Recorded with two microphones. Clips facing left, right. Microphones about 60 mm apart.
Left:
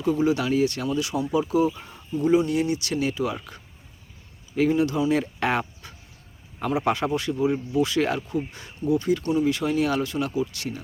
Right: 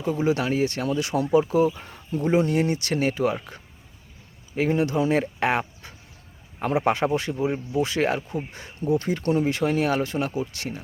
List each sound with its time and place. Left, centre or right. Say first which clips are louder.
0.2 s speech: right 2 dB; right
3.3 s speech: right 3 dB; right